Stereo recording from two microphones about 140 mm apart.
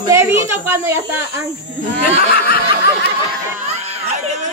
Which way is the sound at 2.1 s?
90° left.